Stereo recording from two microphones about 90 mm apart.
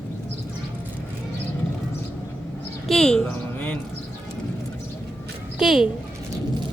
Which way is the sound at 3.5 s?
15° left (ahead or behind).